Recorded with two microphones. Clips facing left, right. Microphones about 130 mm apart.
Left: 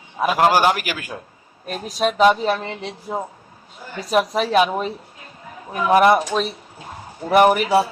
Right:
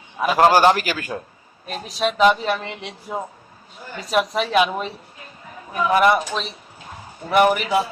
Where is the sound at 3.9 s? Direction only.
35° left (ahead or behind).